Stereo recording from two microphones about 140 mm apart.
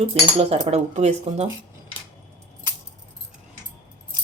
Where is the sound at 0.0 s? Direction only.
45° right (ahead or behind).